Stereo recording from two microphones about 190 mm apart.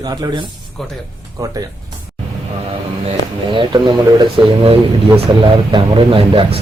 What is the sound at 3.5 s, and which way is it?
Speech, 25° right (ahead or behind).